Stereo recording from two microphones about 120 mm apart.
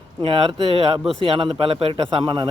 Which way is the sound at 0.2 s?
50° right (ahead or behind).